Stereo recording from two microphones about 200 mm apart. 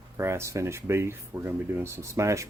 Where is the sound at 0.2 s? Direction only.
15° right (ahead or behind).